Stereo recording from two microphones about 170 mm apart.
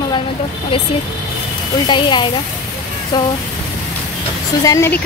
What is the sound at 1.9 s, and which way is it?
A woman's voice, 25° left (ahead or behind).